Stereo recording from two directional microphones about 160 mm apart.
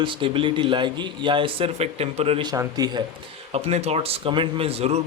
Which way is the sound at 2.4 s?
25° right (ahead or behind).